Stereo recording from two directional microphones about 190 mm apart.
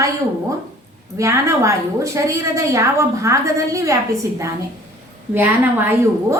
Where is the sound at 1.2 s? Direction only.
15° right (ahead or behind).